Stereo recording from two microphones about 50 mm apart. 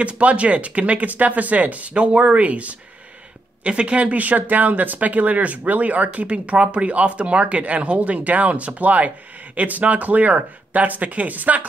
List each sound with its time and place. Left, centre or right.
0.0 s speech: right